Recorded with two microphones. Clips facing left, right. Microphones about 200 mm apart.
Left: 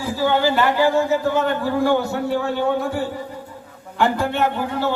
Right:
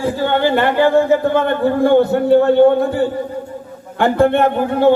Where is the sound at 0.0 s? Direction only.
60° right (ahead or behind).